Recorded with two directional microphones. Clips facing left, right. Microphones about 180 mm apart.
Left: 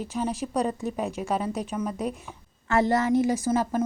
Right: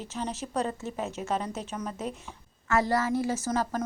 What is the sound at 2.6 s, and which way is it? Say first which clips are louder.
A woman's voice: left 4 dB; 25° left (ahead or behind).